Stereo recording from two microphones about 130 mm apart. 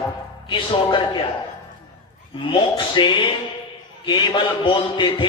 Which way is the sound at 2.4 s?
40° left (ahead or behind).